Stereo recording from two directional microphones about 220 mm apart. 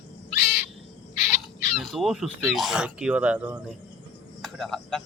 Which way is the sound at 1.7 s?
Centre (ahead or behind).